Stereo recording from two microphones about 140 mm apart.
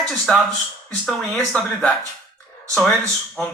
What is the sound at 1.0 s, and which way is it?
Speech, 5° left (ahead or behind).